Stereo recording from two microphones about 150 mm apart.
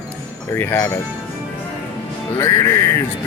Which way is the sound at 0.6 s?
15° left (ahead or behind).